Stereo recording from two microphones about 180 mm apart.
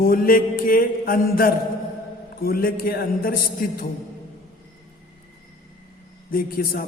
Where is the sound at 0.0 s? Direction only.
55° left (ahead or behind).